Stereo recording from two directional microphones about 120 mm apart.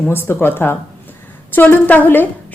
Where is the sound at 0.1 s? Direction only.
20° left (ahead or behind).